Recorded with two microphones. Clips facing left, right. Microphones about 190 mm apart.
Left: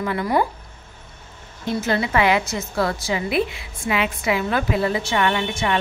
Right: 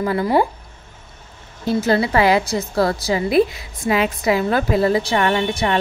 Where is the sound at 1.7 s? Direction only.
35° right (ahead or behind).